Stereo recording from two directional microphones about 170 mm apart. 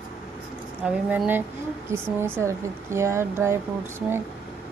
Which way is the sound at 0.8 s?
5° right (ahead or behind).